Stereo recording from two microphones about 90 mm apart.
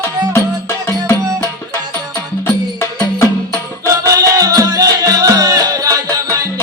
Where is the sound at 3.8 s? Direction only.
35° right (ahead or behind).